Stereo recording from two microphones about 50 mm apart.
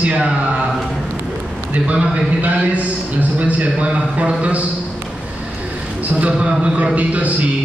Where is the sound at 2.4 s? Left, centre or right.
Right.